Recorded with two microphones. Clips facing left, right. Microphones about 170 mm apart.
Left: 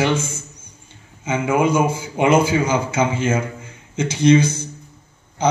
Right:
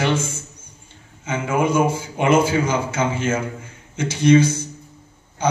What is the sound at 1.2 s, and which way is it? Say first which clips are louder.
A man's voice: left 3 dB; 10° left (ahead or behind).